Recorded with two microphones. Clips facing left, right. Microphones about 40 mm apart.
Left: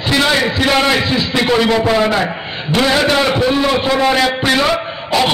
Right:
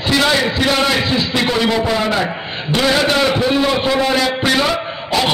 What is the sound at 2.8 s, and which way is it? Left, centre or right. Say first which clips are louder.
A man's voice: left 1 dB; centre.